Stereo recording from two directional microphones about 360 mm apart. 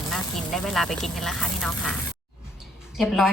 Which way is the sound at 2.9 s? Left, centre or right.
Centre.